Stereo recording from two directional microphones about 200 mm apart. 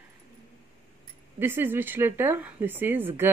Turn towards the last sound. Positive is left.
turn(degrees=-10)  # may be behind; listen again after turning